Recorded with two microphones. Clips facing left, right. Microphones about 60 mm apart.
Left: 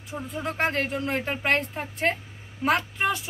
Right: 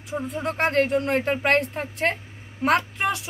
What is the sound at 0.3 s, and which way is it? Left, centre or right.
Speech, right.